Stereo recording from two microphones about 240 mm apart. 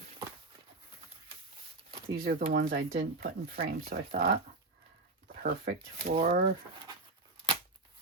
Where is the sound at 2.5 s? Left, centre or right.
Right.